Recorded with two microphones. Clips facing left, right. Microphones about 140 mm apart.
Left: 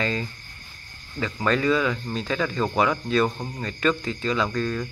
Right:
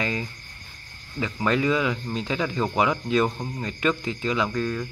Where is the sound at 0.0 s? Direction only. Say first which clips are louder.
Left 1 dB; 15° right (ahead or behind).